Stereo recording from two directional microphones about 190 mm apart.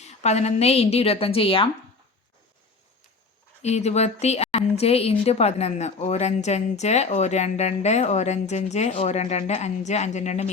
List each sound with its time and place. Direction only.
0.0 s a woman's voice: 35° left (ahead or behind)
3.6 s a woman's voice: 35° left (ahead or behind)